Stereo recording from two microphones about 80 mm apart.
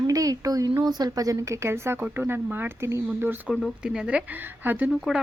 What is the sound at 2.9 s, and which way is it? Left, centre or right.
Speech, right.